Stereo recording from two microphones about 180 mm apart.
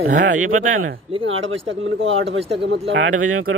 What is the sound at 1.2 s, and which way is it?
Speech, 90° right.